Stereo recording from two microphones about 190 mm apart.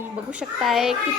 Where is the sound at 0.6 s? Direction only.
Centre (ahead or behind).